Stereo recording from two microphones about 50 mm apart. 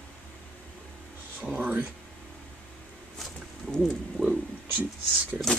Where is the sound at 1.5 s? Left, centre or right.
Right.